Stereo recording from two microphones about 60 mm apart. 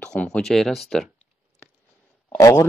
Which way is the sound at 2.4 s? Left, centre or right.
Left.